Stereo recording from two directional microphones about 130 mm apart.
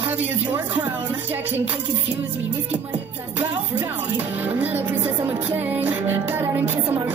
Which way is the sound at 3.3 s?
15° right (ahead or behind).